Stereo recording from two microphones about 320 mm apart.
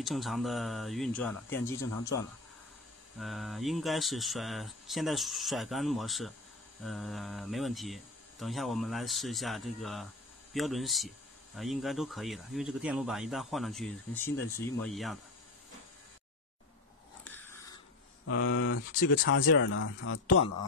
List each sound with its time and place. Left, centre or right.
0.0 s speech: centre
17.2 s biting: centre
18.2 s speech: left